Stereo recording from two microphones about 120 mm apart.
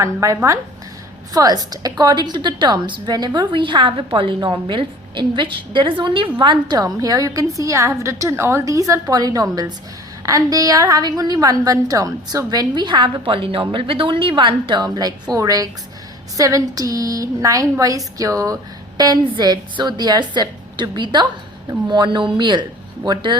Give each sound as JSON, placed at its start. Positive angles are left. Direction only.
{"t": 0.0, "sound": "a woman's voice", "side_deg": -25}